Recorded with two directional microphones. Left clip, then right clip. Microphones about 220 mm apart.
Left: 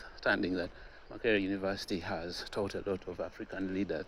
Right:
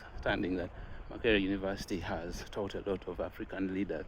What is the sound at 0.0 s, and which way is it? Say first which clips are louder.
Speech: left 3 dB; 5° left (ahead or behind).